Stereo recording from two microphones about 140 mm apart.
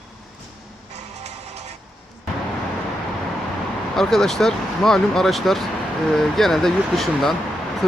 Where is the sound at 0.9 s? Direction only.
55° right (ahead or behind).